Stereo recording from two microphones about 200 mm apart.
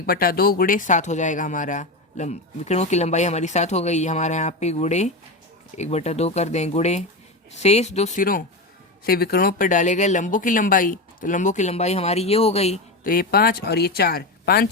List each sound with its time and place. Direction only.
0.0 s speech: 45° left (ahead or behind); by 12.8 s 30° left (ahead or behind)
13.1 s speech: 45° left (ahead or behind)